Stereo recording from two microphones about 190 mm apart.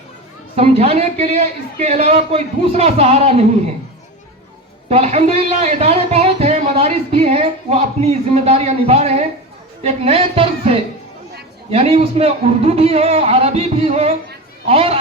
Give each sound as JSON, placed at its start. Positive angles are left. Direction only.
{"t": 0.5, "sound": "a man's voice", "side_deg": -30}
{"t": 4.9, "sound": "a man's voice", "side_deg": -35}